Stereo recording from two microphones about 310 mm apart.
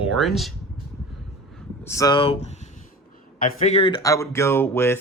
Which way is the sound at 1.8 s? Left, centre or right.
Centre.